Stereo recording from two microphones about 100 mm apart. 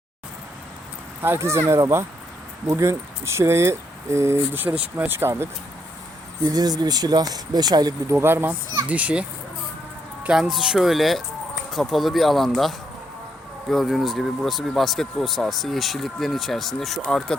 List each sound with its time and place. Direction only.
1.2 s speech: 25° right (ahead or behind)
6.4 s speech: 40° right (ahead or behind)
8.1 s speech: 25° right (ahead or behind)
10.2 s speech: 5° right (ahead or behind)